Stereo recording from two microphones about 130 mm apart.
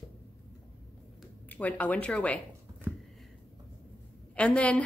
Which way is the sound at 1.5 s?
10° left (ahead or behind).